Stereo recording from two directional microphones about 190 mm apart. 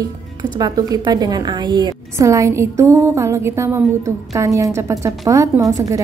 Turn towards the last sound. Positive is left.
turn(degrees=-15)  # may be behind; listen again after turning